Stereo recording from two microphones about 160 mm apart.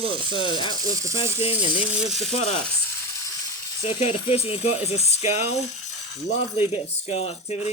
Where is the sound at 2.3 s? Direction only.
45° left (ahead or behind).